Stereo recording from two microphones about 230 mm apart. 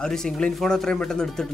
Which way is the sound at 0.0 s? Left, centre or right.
Centre.